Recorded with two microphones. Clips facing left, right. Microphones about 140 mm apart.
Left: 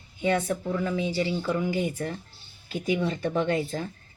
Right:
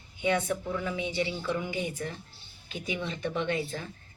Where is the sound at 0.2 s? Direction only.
35° left (ahead or behind).